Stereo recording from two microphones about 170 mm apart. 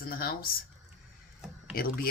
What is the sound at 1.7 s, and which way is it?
Speech, 60° left (ahead or behind).